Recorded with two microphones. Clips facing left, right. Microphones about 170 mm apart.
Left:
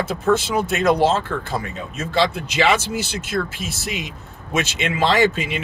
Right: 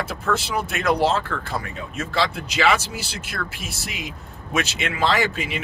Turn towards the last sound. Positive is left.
turn(degrees=20)  # may be behind; listen again after turning